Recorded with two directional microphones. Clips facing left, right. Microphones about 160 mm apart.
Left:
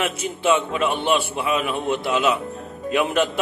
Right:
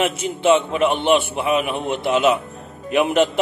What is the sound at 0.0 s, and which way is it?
Speech, 25° right (ahead or behind).